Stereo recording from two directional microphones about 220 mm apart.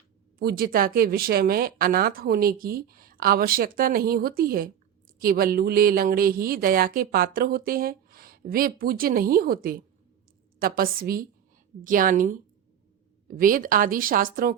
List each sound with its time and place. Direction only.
0.3 s speech: 45° right (ahead or behind)